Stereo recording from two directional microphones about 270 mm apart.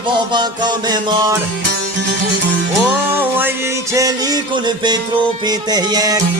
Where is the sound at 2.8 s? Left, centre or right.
Centre.